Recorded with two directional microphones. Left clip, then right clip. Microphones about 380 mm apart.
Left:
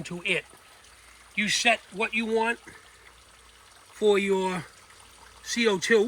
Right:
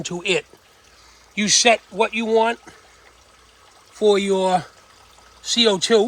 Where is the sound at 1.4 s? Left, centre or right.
Right.